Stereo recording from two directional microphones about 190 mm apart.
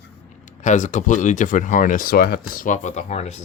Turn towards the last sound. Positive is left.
turn(degrees=35)  # may be behind; listen again after turning